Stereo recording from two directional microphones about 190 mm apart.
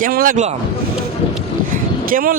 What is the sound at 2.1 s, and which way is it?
Speech, 50° right (ahead or behind).